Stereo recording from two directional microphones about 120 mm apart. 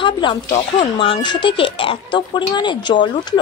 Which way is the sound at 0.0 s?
45° left (ahead or behind).